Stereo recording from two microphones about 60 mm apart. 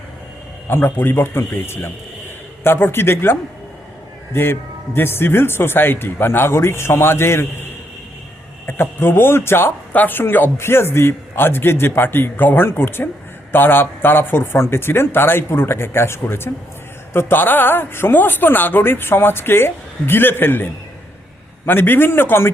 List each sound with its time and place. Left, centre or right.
0.7 s speech: left
4.3 s a man's voice: left
9.9 s speech: left
21.7 s speech: left